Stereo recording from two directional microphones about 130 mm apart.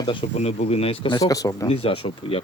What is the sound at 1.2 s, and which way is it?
Speech, 25° left (ahead or behind).